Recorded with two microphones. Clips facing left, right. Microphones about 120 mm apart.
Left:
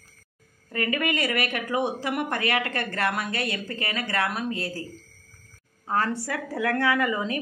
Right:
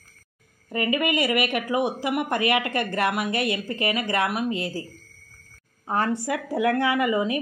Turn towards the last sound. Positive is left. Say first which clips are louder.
# right 2 dB
turn(degrees=-15)  # may be behind; listen again after turning